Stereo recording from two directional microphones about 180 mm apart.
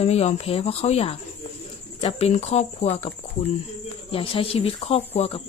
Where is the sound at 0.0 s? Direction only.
35° left (ahead or behind).